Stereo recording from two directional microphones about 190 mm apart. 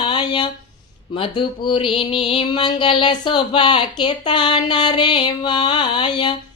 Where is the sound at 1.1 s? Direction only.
25° left (ahead or behind).